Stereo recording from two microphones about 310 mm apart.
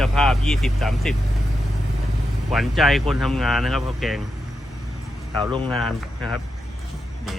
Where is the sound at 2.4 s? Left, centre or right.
Centre.